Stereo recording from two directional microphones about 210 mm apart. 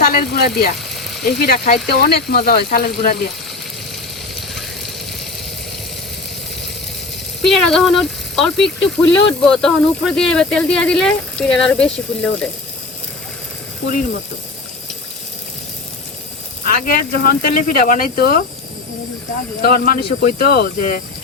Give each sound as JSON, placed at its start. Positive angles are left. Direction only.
{"t": 0.0, "sound": "speech", "side_deg": 45}
{"t": 7.4, "sound": "speech", "side_deg": 0}
{"t": 16.6, "sound": "speech", "side_deg": 45}
{"t": 19.6, "sound": "speech", "side_deg": 45}